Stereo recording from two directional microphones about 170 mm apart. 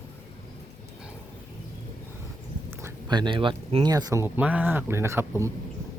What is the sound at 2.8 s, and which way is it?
Speech, 20° right (ahead or behind).